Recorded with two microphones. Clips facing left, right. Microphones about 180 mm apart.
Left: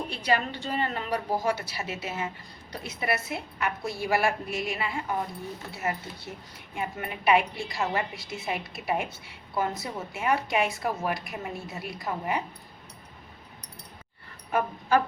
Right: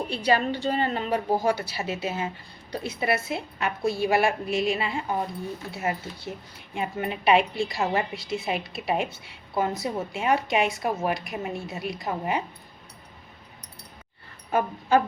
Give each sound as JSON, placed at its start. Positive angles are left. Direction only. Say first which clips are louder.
{"t": 0.1, "sound": "a woman's voice", "louder": "right 5 dB", "side_deg": -30}
{"t": 14.5, "sound": "a woman's voice", "louder": "right 2 dB", "side_deg": -25}